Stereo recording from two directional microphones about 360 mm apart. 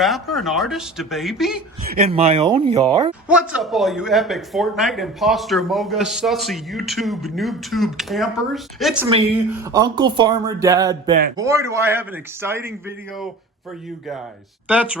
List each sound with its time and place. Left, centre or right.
0.0 s speech: centre
1.9 s speech: centre
14.7 s speech: centre